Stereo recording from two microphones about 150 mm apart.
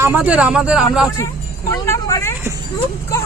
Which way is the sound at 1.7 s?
20° left (ahead or behind).